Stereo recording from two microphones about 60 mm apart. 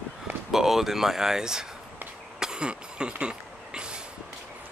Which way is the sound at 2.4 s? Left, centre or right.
Centre.